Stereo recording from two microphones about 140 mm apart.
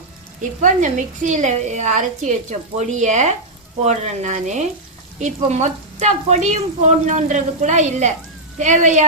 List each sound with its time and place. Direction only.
0.6 s a woman's voice: 65° right (ahead or behind)